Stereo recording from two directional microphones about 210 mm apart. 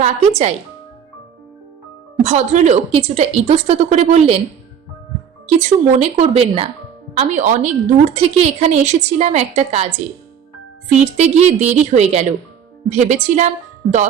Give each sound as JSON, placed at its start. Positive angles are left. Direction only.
{"t": 0.0, "sound": "a woman's voice", "side_deg": -30}
{"t": 2.2, "sound": "a woman's voice", "side_deg": -35}
{"t": 5.5, "sound": "a woman's voice", "side_deg": -35}
{"t": 10.8, "sound": "a woman's voice", "side_deg": -30}